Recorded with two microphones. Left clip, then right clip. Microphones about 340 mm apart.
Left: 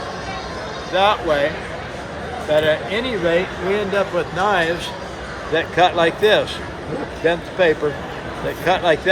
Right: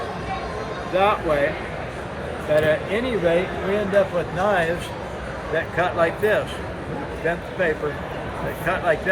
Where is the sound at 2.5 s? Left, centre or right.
Centre.